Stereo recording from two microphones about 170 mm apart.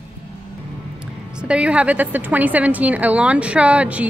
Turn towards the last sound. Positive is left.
turn(degrees=-10)  # may be behind; listen again after turning